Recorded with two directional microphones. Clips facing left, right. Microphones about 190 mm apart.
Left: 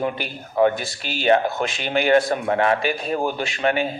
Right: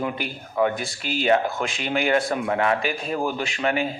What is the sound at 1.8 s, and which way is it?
Speech, 30° left (ahead or behind).